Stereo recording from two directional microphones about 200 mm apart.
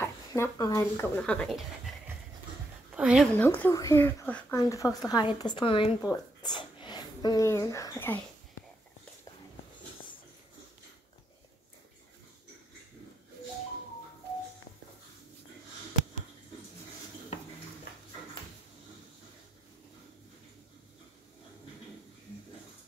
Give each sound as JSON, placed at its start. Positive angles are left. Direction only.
{"t": 0.0, "sound": "speech", "side_deg": 15}
{"t": 3.0, "sound": "speech", "side_deg": -5}
{"t": 3.3, "sound": "speech", "side_deg": 10}